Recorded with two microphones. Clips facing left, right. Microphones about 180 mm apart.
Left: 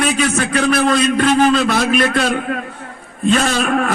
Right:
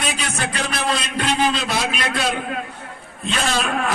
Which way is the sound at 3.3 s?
50° left (ahead or behind).